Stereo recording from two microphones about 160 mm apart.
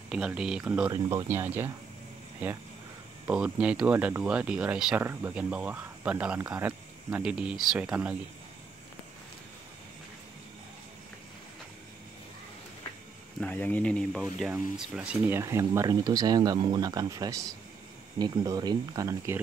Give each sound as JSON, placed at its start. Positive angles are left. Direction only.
{"t": 0.1, "sound": "speech", "side_deg": -5}
{"t": 0.8, "sound": "speech", "side_deg": -25}
{"t": 1.2, "sound": "speech", "side_deg": -15}
{"t": 3.3, "sound": "speech", "side_deg": -10}
{"t": 13.4, "sound": "speech", "side_deg": 10}
{"t": 14.5, "sound": "speech", "side_deg": -10}